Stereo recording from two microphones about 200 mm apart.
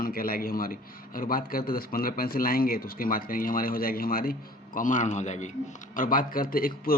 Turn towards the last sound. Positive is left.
turn(degrees=45)  # may be behind; listen again after turning